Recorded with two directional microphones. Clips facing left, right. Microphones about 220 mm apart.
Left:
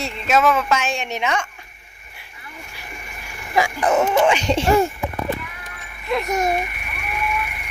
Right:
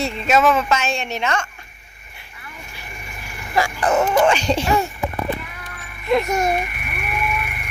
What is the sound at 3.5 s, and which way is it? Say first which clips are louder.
Dog: left 1 dB; 15° left (ahead or behind).